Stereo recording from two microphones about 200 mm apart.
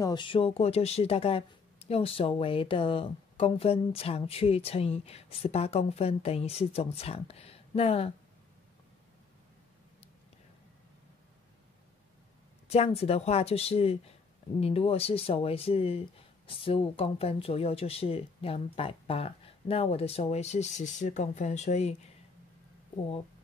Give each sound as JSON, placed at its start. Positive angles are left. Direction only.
{"t": 0.0, "sound": "speech", "side_deg": 20}
{"t": 12.6, "sound": "speech", "side_deg": 30}